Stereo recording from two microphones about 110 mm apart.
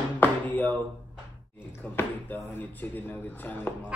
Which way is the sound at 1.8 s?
20° left (ahead or behind).